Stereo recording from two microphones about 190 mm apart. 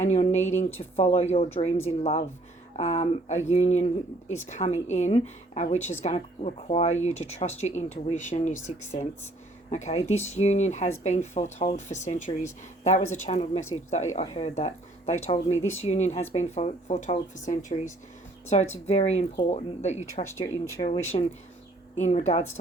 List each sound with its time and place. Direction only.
0.0 s speech: 35° left (ahead or behind)
20.8 s speech: 25° left (ahead or behind)